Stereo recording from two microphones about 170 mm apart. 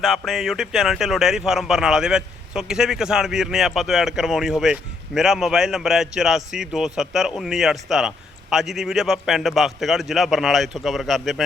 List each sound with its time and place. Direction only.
0.0 s speech: centre (ahead or behind)